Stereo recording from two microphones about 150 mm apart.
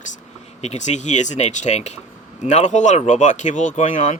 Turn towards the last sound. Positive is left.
turn(degrees=55)  # may be behind; listen again after turning